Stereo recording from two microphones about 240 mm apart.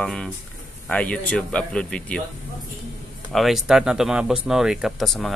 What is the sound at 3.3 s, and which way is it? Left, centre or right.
Speech, centre.